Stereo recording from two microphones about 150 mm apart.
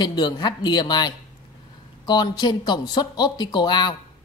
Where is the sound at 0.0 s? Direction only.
30° left (ahead or behind).